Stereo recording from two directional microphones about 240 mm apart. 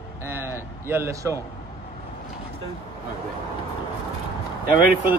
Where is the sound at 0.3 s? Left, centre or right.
Centre.